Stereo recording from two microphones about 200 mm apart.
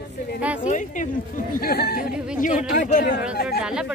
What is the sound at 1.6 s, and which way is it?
Speech, 50° left (ahead or behind).